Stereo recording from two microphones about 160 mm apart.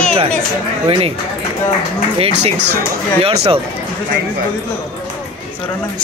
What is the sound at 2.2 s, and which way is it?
A man's voice, 45° right (ahead or behind).